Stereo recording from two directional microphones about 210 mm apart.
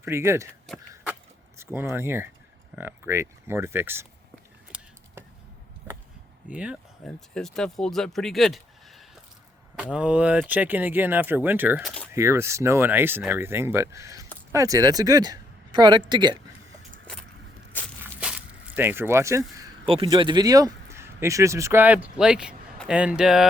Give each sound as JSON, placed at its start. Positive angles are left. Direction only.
{"t": 0.0, "sound": "speech", "side_deg": -10}
{"t": 1.5, "sound": "speech", "side_deg": -10}
{"t": 6.5, "sound": "speech", "side_deg": -5}
{"t": 18.0, "sound": "a sound", "side_deg": -5}
{"t": 19.8, "sound": "speech", "side_deg": -25}